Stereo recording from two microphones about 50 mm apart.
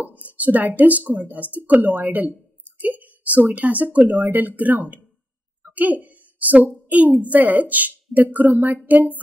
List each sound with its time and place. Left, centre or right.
0.3 s speech: right
5.7 s a sound: right
7.2 s speech: right